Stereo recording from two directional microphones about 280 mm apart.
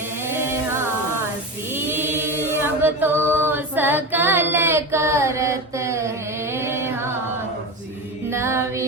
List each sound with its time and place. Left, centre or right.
0.3 s a sound: centre
1.7 s chant: centre
6.5 s music: centre
8.3 s music: centre